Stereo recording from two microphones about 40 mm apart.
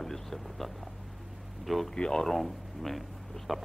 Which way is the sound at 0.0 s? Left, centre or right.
Centre.